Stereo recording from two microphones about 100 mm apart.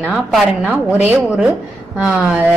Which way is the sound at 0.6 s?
15° right (ahead or behind).